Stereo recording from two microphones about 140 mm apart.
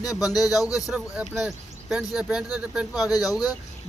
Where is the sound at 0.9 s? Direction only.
Centre (ahead or behind).